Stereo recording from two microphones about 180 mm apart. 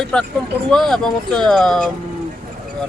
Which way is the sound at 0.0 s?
5° left (ahead or behind).